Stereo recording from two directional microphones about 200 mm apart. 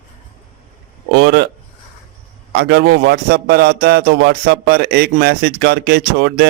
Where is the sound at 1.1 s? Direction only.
55° right (ahead or behind).